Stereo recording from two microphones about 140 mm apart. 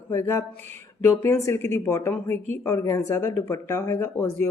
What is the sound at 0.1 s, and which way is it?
Speech, 20° left (ahead or behind).